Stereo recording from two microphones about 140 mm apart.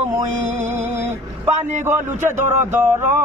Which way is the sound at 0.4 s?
60° right (ahead or behind).